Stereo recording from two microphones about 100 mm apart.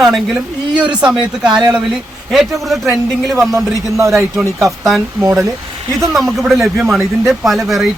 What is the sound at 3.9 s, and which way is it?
Speech, 30° right (ahead or behind).